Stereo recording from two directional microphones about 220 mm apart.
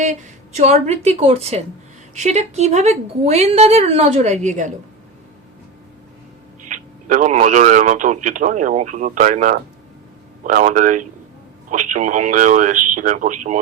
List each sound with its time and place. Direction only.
0.0 s speech: 30° right (ahead or behind)
6.7 s speech: 35° right (ahead or behind)